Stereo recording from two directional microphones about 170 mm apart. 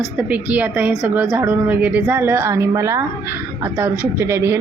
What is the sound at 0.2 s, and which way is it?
A woman's voice, 10° right (ahead or behind).